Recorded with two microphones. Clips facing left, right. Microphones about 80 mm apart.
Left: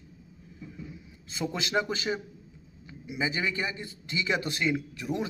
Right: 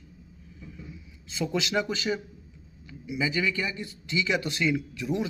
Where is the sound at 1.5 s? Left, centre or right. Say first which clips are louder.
Right 2 dB; left.